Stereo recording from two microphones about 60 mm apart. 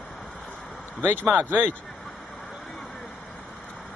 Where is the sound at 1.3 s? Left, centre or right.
Right.